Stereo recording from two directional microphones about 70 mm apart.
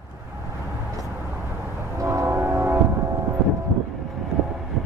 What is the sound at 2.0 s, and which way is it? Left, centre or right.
Train, right.